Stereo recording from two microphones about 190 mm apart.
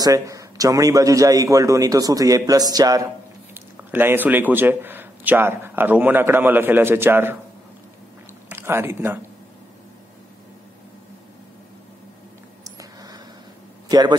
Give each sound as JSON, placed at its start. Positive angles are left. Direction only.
{"t": 0.0, "sound": "a man's voice", "side_deg": -15}
{"t": 8.5, "sound": "speech", "side_deg": -10}
{"t": 13.8, "sound": "a man's voice", "side_deg": -20}